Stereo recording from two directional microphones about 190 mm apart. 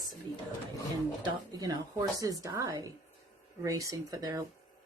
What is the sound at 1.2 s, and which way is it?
Speech, 20° right (ahead or behind).